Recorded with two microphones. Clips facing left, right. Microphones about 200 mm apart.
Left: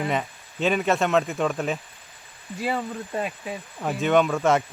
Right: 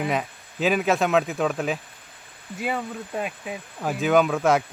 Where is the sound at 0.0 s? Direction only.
Centre (ahead or behind).